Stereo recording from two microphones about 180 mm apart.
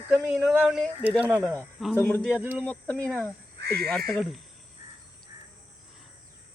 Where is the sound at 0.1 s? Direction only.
Centre (ahead or behind).